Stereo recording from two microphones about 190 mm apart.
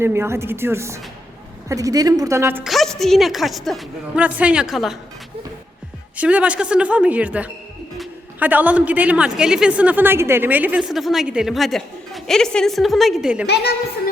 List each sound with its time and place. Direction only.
0.0 s a woman's voice: 15° right (ahead or behind)
2.6 s a woman's voice: centre (ahead or behind)
6.1 s a woman's voice: 5° right (ahead or behind)
13.5 s a woman's voice: 55° left (ahead or behind)